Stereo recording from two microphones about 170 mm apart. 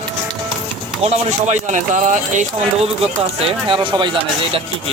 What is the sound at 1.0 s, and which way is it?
Speech, 45° right (ahead or behind).